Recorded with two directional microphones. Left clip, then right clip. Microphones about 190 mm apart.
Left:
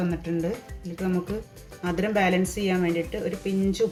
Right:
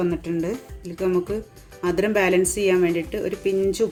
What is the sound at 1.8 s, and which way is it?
Speech, 70° right (ahead or behind).